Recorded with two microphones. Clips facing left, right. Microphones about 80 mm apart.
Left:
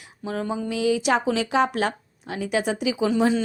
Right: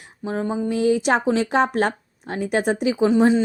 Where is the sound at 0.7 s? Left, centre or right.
Right.